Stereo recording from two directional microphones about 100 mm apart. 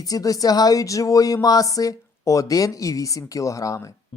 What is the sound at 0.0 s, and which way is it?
Speech, 40° left (ahead or behind).